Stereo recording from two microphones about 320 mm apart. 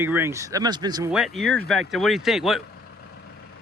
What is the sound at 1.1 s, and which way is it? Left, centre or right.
Speech, centre.